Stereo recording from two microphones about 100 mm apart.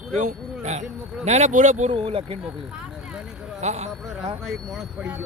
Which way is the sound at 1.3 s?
90° right.